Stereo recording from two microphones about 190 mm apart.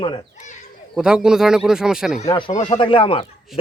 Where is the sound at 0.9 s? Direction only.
5° right (ahead or behind).